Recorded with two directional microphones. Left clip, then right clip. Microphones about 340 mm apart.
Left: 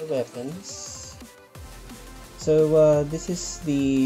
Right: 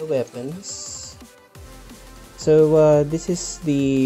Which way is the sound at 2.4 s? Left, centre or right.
Right.